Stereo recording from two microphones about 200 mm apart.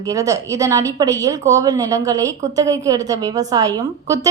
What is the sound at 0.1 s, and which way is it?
A woman's voice, 15° right (ahead or behind).